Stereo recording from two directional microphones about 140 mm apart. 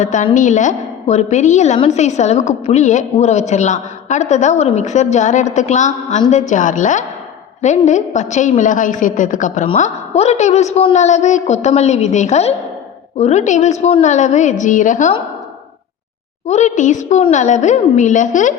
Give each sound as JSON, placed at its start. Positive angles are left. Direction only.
{"t": 0.0, "sound": "a woman's voice", "side_deg": 60}
{"t": 16.5, "sound": "a woman's voice", "side_deg": 55}